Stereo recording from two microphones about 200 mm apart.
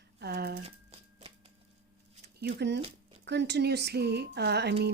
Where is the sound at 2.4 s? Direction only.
55° right (ahead or behind).